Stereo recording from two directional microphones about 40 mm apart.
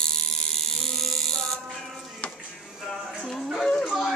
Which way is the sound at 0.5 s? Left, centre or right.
Centre.